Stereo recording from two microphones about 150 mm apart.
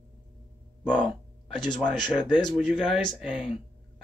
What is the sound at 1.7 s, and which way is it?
Speech, 30° left (ahead or behind).